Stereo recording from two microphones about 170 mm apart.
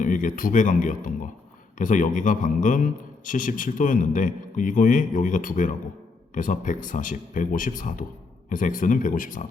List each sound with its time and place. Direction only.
0.0 s a man's voice: 50° left (ahead or behind)